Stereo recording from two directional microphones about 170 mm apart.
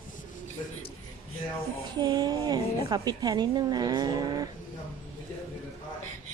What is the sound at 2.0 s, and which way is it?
A woman's voice, 25° right (ahead or behind).